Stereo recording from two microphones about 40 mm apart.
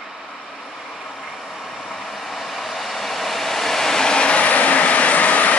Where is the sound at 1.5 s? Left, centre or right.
Centre.